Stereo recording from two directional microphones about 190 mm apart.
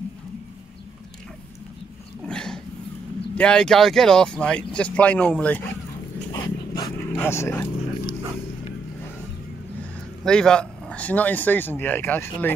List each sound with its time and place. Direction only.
2.2 s dog: 5° left (ahead or behind)
3.3 s speech: 5° left (ahead or behind)
6.3 s dog: 20° left (ahead or behind)
7.1 s speech: 10° left (ahead or behind)
10.2 s speech: 5° left (ahead or behind)